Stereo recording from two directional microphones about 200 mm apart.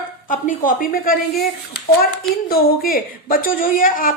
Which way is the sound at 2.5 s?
50° left (ahead or behind).